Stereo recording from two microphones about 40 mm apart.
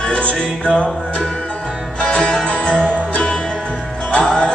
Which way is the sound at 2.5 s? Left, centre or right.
Left.